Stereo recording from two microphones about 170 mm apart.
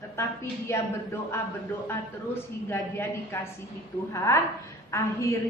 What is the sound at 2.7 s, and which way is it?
A woman's voice, 15° left (ahead or behind).